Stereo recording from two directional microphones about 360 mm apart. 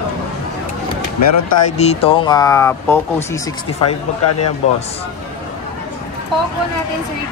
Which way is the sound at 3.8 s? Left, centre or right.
Left.